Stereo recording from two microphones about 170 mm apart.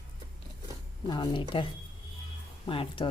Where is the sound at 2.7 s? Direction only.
30° left (ahead or behind).